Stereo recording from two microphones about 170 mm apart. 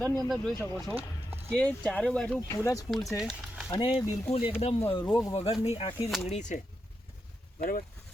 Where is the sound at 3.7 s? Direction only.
30° left (ahead or behind).